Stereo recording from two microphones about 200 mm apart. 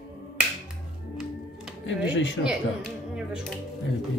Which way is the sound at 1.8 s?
65° left (ahead or behind).